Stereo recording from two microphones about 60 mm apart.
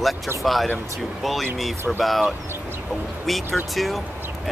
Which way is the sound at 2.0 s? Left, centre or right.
Centre.